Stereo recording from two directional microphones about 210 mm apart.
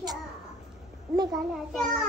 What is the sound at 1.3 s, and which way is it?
Speech, centre (ahead or behind).